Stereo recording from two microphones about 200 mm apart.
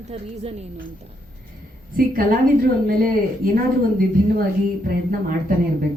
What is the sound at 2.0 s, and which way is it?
A woman's voice, 45° right (ahead or behind).